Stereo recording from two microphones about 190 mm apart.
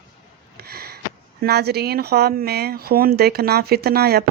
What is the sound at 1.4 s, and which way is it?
A woman's voice, 55° right (ahead or behind).